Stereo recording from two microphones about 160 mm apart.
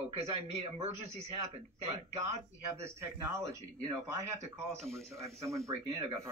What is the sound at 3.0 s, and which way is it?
Speech, 20° right (ahead or behind).